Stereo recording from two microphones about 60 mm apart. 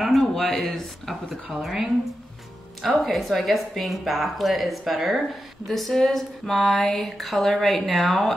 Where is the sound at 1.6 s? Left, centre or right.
Centre.